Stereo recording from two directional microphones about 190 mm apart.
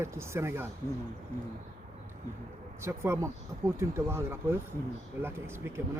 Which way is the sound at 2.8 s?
15° right (ahead or behind).